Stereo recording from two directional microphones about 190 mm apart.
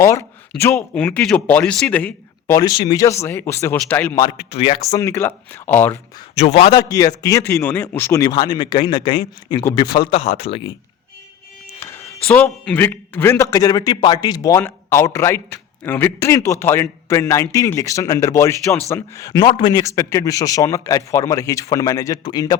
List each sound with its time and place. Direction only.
0.6 s a man's voice: 5° left (ahead or behind)
2.6 s a man's voice: 20° left (ahead or behind)
4.4 s speech: 30° left (ahead or behind)
4.9 s a man's voice: 15° left (ahead or behind)
6.3 s a man's voice: 35° left (ahead or behind)
6.7 s a man's voice: 20° left (ahead or behind); by 10.6 s 35° left (ahead or behind)
11.8 s a man's voice: 15° left (ahead or behind)